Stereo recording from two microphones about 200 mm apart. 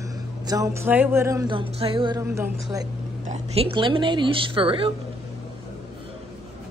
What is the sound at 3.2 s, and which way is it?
A woman's voice, 35° right (ahead or behind).